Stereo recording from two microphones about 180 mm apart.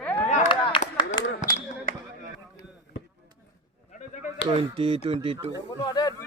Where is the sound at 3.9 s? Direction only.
40° left (ahead or behind).